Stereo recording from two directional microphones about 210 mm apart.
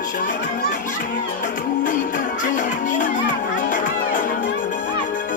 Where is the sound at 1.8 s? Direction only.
40° left (ahead or behind).